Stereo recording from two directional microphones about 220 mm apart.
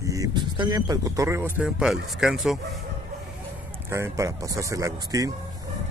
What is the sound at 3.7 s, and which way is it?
Speech, 10° right (ahead or behind).